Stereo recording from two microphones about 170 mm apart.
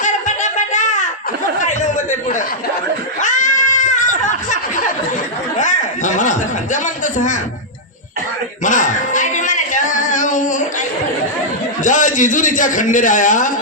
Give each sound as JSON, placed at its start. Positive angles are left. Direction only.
{"t": 0.0, "sound": "a sound", "side_deg": 45}
{"t": 1.6, "sound": "chatter", "side_deg": 45}
{"t": 3.2, "sound": "goat", "side_deg": 45}
{"t": 4.2, "sound": "a sound", "side_deg": 45}
{"t": 5.5, "sound": "chuckle", "side_deg": 45}
{"t": 8.6, "sound": "singing", "side_deg": 50}
{"t": 11.8, "sound": "a man's voice", "side_deg": 50}